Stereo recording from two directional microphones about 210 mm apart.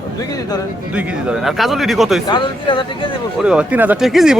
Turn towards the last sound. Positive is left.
turn(degrees=0)  # may be behind; listen again after turning